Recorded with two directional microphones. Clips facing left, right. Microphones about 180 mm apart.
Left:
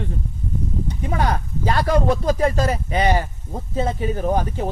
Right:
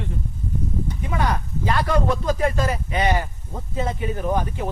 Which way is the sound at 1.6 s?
35° left (ahead or behind).